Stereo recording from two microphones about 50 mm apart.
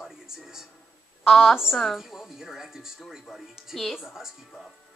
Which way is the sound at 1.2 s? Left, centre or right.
Centre.